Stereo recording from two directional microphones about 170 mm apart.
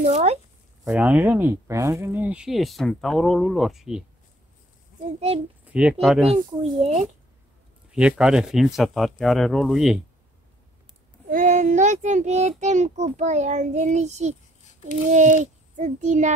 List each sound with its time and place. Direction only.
0.0 s speech: 40° right (ahead or behind)
0.8 s speech: 5° right (ahead or behind)
5.7 s speech: 5° right (ahead or behind)
6.3 s speech: 40° right (ahead or behind)
7.9 s speech: 5° right (ahead or behind)
11.2 s a child's voice: 50° right (ahead or behind)